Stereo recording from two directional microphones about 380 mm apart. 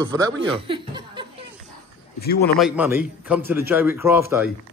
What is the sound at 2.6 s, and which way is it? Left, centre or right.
A man's voice, centre.